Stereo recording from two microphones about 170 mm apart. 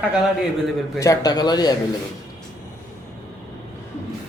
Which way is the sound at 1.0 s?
20° left (ahead or behind).